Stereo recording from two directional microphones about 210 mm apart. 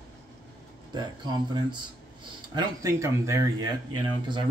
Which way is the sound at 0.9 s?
20° right (ahead or behind).